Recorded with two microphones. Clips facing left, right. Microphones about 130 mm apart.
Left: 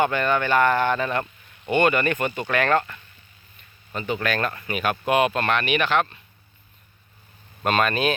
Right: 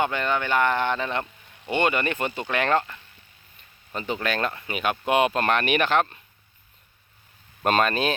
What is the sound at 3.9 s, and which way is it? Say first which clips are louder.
Speech: left 2 dB; 30° right (ahead or behind).